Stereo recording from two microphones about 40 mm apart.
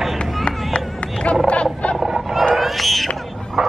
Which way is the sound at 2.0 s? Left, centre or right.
Centre.